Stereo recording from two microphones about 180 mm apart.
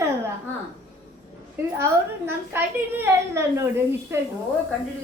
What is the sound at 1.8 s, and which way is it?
A woman's voice, 10° right (ahead or behind).